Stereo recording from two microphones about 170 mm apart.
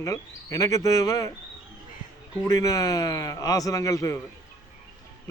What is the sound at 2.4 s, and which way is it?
Speech, 20° left (ahead or behind).